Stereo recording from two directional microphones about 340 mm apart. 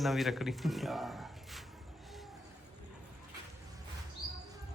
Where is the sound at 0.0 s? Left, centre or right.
Centre.